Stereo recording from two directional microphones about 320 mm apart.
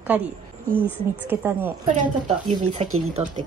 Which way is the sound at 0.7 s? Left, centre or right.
Centre.